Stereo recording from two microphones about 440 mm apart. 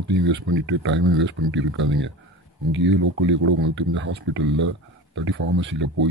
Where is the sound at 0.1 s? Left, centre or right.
Right.